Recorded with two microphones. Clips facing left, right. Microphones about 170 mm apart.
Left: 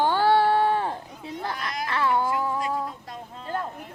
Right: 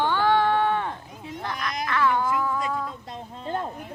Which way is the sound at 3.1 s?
25° right (ahead or behind).